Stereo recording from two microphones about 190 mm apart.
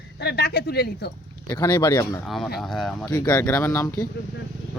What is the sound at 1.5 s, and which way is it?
Speech, 15° left (ahead or behind).